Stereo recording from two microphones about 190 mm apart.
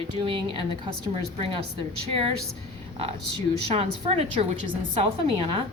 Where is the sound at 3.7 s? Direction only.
35° right (ahead or behind).